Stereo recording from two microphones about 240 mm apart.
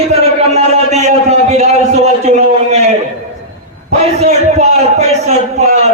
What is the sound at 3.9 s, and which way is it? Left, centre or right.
A man's voice, right.